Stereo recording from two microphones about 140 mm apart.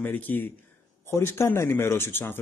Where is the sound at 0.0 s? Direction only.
15° left (ahead or behind).